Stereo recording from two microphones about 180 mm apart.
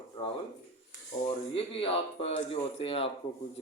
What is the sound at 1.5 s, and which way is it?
Speech, 30° left (ahead or behind).